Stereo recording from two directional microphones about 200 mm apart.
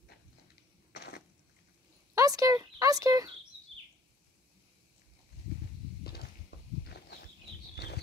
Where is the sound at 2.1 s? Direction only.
15° right (ahead or behind).